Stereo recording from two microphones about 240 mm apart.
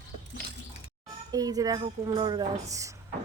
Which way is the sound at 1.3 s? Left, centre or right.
Centre.